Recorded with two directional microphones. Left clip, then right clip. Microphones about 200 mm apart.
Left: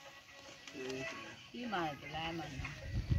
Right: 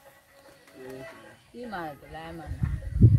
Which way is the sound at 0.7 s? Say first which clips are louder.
Right 1 dB; 45° right (ahead or behind).